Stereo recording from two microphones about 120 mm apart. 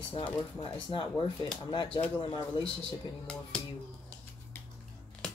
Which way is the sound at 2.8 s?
10° left (ahead or behind).